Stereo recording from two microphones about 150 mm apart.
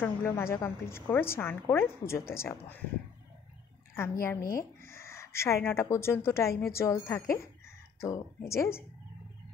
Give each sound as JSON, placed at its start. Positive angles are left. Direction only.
{"t": 0.0, "sound": "a woman's voice", "side_deg": 15}
{"t": 3.9, "sound": "a woman's voice", "side_deg": 15}